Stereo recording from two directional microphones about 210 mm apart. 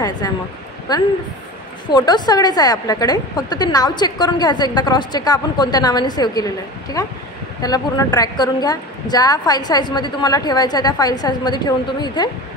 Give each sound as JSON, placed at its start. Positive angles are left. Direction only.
{"t": 0.2, "sound": "a woman's voice", "side_deg": 15}